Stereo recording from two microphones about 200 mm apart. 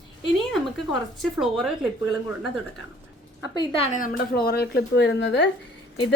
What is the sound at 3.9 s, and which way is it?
A woman's voice, 45° left (ahead or behind).